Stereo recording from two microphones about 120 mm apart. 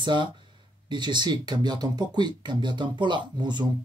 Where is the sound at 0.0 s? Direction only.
40° right (ahead or behind).